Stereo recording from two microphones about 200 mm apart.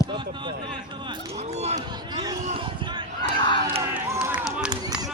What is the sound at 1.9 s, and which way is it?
Speech, 20° right (ahead or behind).